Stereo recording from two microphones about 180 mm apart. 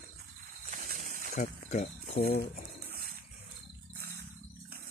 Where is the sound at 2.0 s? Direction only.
60° left (ahead or behind).